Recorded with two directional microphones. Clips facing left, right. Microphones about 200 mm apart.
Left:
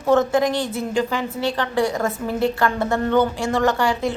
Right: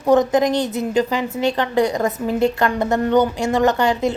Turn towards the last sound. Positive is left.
turn(degrees=-20)  # may be behind; listen again after turning